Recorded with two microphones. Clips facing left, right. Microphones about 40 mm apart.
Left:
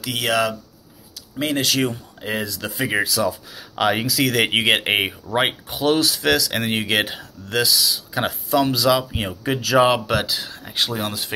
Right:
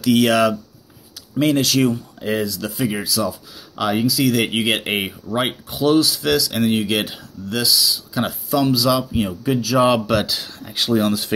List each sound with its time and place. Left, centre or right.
0.0 s speech: centre
1.4 s speech: left
2.4 s speech: left
9.8 s speech: centre